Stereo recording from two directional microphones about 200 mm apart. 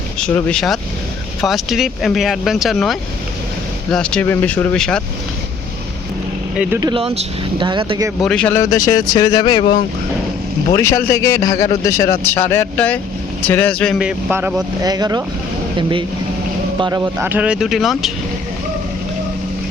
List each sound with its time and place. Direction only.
0.2 s speech: 5° left (ahead or behind)
6.6 s speech: 15° right (ahead or behind)
8.2 s a man's voice: 5° left (ahead or behind); by 9.7 s 20° left (ahead or behind)
10.8 s a man's voice: 15° left (ahead or behind); by 15.2 s 20° right (ahead or behind)
16.8 s speech: 15° right (ahead or behind)